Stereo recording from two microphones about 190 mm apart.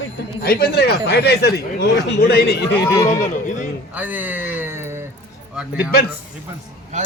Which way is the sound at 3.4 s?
40° left (ahead or behind).